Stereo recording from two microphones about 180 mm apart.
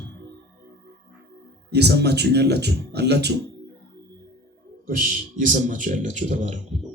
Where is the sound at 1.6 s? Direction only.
65° right (ahead or behind).